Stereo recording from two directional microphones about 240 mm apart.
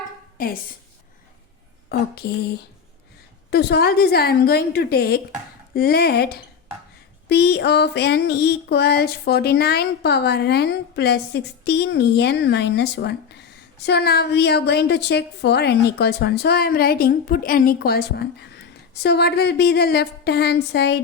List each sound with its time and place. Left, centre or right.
0.3 s a woman's voice: left
1.9 s a woman's voice: left
3.5 s a woman's voice: left
7.3 s a sound: left
16.0 s a woman's voice: left
19.0 s a sound: left